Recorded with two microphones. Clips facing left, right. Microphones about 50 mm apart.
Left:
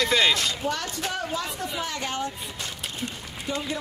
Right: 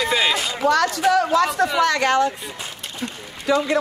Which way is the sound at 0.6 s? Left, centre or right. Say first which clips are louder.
Right 11 dB; right.